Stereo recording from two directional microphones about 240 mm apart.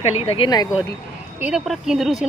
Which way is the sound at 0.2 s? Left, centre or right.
Left.